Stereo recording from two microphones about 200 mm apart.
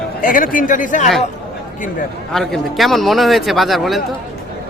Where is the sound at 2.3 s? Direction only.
Centre (ahead or behind).